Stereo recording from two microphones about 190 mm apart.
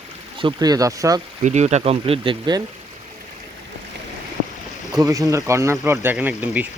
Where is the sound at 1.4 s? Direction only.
35° right (ahead or behind).